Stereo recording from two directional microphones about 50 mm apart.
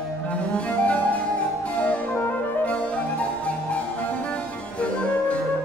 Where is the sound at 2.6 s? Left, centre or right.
Left.